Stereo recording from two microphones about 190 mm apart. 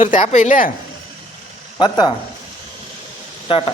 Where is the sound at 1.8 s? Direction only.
25° left (ahead or behind).